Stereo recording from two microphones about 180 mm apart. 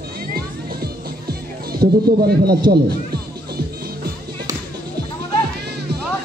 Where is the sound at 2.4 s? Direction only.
60° right (ahead or behind).